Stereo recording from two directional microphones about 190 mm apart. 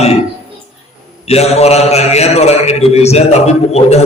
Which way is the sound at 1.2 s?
35° left (ahead or behind).